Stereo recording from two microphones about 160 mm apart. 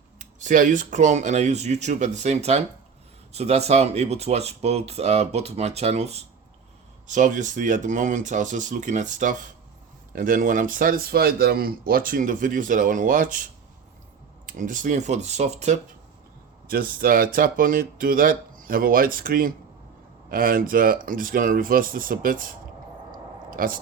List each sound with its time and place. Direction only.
0.2 s speech: 50° right (ahead or behind)
16.6 s speech: 65° right (ahead or behind)